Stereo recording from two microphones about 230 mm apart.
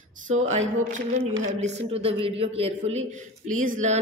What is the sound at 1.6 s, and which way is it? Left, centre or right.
A woman's voice, right.